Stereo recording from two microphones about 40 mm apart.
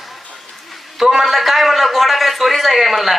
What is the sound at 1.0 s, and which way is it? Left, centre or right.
A man's voice, centre.